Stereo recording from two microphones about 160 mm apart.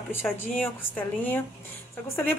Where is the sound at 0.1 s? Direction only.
10° left (ahead or behind).